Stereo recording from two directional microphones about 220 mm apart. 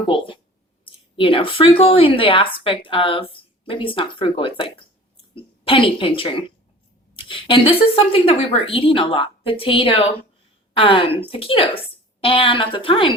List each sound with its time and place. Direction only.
0.9 s speech: 25° left (ahead or behind)